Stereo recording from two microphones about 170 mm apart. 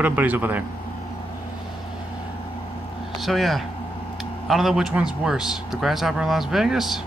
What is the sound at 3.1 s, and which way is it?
A man's voice, centre (ahead or behind).